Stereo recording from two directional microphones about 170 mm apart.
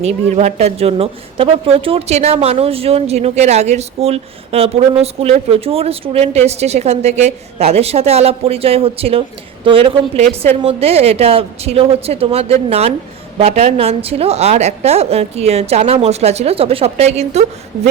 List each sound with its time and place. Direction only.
0.0 s speech: 40° right (ahead or behind)